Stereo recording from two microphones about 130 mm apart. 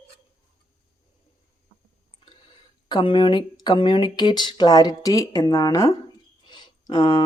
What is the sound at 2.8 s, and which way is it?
Speech, 35° left (ahead or behind).